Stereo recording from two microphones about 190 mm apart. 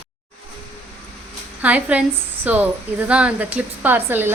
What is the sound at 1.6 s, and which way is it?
A woman's voice, 10° right (ahead or behind).